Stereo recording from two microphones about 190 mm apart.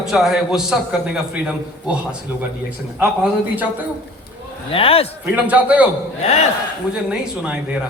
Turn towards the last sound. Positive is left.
turn(degrees=-5)  # may be behind; listen again after turning